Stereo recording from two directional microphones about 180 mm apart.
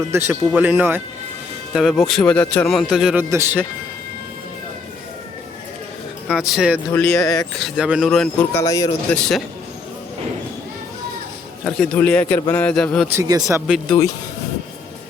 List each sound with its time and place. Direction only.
0.1 s speech: 10° right (ahead or behind)
1.7 s speech: centre (ahead or behind)
6.2 s speech: centre (ahead or behind)
6.9 s a man's voice: 15° left (ahead or behind)
7.6 s speech: 5° right (ahead or behind); by 8.9 s 20° left (ahead or behind)
9.1 s speech: 5° left (ahead or behind)
11.6 s a man's voice: 5° left (ahead or behind)
13.1 s speech: 15° right (ahead or behind)
13.7 s speech: centre (ahead or behind)